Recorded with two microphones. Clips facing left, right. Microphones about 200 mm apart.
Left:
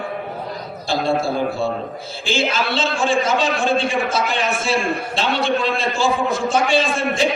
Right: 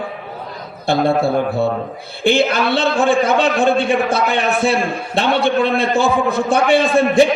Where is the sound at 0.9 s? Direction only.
60° right (ahead or behind).